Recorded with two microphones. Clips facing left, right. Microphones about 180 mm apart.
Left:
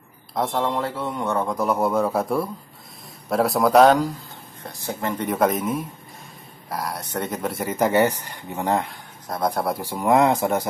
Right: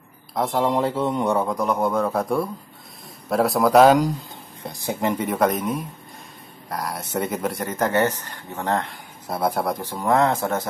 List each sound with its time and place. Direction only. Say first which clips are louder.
0.3 s speech: right 1 dB; centre (ahead or behind)
0.7 s speech: right 4 dB; 20° right (ahead or behind)
1.5 s a man's voice: even; 5° left (ahead or behind)
4.6 s speech: right 3 dB; 15° right (ahead or behind)
5.2 s a man's voice: left 3 dB; centre (ahead or behind)
9.3 s a man's voice: right 1 dB; 5° right (ahead or behind)
9.8 s speech: left 4 dB; 10° left (ahead or behind)